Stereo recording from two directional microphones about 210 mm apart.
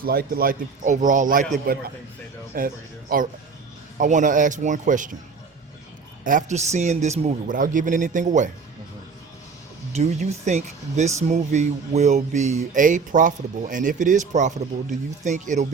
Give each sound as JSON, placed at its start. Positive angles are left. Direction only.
{"t": 0.0, "sound": "speech", "side_deg": -45}
{"t": 2.6, "sound": "speech", "side_deg": -40}
{"t": 6.2, "sound": "speech", "side_deg": -35}
{"t": 9.9, "sound": "speech", "side_deg": -30}